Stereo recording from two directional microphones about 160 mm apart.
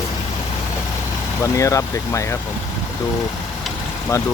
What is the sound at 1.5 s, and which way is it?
Speech, 20° left (ahead or behind).